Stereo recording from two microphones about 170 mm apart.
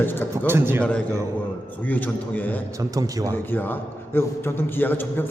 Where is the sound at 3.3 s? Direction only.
10° left (ahead or behind).